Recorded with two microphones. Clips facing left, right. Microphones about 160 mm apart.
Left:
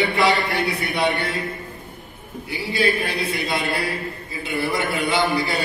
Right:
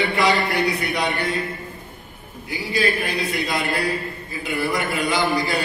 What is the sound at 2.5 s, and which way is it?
Speech, 30° left (ahead or behind).